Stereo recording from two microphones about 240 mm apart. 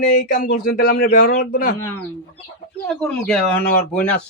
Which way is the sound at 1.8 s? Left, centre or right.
Centre.